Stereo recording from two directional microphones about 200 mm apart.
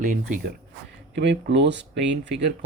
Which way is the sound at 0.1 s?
40° right (ahead or behind).